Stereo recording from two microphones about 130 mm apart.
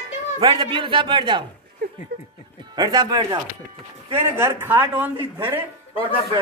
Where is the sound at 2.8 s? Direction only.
30° right (ahead or behind).